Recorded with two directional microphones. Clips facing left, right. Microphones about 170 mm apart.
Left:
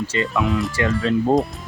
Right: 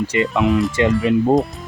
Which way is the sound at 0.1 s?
20° right (ahead or behind).